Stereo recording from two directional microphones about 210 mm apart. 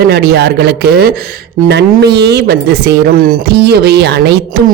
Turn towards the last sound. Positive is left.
turn(degrees=-55)  # may be behind; listen again after turning